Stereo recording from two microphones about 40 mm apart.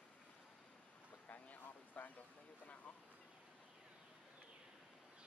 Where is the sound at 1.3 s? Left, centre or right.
Left.